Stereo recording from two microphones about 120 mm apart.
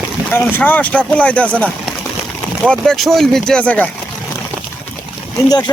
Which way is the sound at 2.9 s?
Centre (ahead or behind).